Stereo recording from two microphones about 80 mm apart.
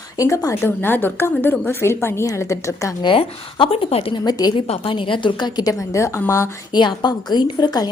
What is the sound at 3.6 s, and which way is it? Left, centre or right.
A woman's voice, left.